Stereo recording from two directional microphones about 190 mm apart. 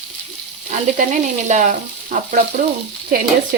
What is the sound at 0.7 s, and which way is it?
Frying, 40° right (ahead or behind).